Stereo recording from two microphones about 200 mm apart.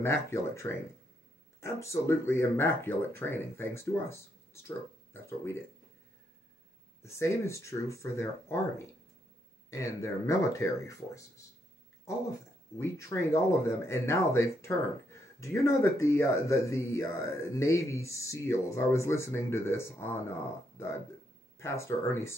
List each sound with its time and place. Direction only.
0.0 s speech: 15° left (ahead or behind)
7.0 s speech: 15° left (ahead or behind)
21.5 s speech: 15° left (ahead or behind)